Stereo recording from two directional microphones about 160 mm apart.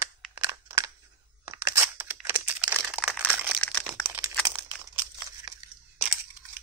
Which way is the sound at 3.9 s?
10° right (ahead or behind).